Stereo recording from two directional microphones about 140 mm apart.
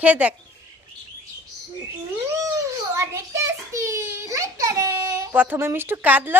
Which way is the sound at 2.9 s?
20° right (ahead or behind).